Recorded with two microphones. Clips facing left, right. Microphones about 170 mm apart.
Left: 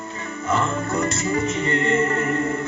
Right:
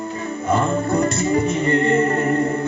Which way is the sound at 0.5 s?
30° right (ahead or behind).